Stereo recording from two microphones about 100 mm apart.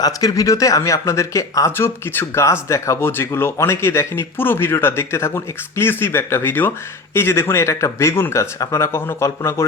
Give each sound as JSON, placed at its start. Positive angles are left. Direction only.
{"t": 0.0, "sound": "speech", "side_deg": 40}